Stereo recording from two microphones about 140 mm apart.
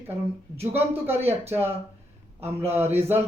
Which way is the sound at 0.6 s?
15° right (ahead or behind).